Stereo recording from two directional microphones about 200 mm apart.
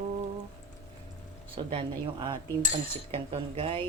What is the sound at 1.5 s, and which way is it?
Speech, 25° right (ahead or behind).